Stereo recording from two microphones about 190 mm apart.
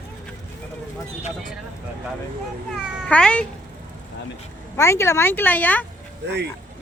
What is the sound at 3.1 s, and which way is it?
Speech, 5° left (ahead or behind).